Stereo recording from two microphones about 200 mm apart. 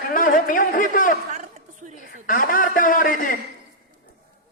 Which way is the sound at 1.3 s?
35° right (ahead or behind).